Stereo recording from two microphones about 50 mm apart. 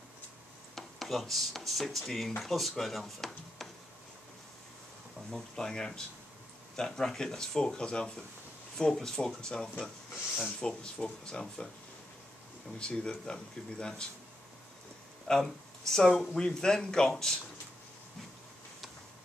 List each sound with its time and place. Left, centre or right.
0.7 s speech: centre
5.3 s speech: centre
12.7 s speech: centre
15.2 s speech: centre